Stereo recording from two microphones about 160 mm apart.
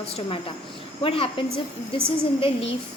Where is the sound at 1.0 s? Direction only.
35° left (ahead or behind).